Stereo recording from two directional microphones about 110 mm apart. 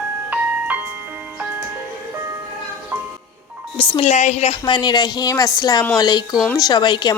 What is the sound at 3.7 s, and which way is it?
Speech, 55° left (ahead or behind).